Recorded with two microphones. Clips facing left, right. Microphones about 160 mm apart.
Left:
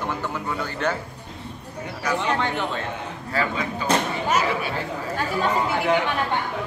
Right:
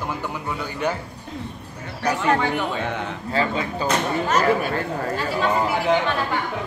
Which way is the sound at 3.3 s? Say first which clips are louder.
Right 2 dB; 30° right (ahead or behind).